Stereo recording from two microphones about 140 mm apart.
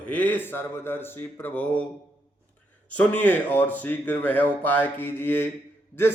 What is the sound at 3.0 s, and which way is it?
A man's voice, 10° left (ahead or behind).